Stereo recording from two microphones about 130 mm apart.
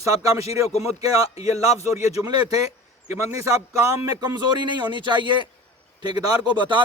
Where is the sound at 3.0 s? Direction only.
20° right (ahead or behind).